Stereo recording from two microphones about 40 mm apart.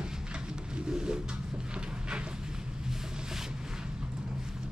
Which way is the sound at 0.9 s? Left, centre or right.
Centre.